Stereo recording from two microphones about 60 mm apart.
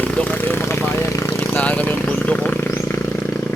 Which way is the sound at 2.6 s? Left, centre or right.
Left.